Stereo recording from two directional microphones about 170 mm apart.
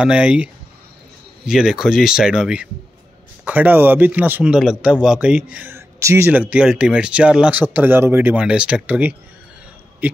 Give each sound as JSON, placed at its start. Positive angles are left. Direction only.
{"t": 0.0, "sound": "speech", "side_deg": -5}